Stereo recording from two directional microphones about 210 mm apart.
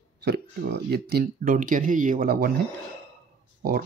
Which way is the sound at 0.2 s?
50° right (ahead or behind).